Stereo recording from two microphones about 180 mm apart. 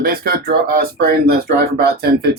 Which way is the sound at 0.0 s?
55° right (ahead or behind).